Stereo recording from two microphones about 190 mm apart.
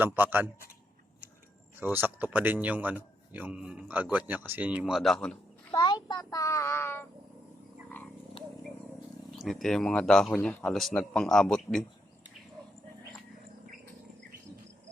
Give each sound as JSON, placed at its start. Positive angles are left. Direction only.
{"t": 0.0, "sound": "speech", "side_deg": -10}
{"t": 1.8, "sound": "speech", "side_deg": -10}
{"t": 5.7, "sound": "a child's voice", "side_deg": 25}
{"t": 9.3, "sound": "speech", "side_deg": 0}